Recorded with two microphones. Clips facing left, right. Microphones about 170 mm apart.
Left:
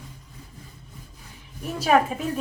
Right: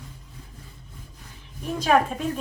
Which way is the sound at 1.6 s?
5° left (ahead or behind).